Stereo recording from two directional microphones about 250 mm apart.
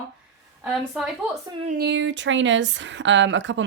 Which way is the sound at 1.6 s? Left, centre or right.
Right.